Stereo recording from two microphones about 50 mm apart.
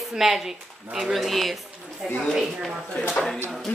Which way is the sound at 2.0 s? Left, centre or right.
Centre.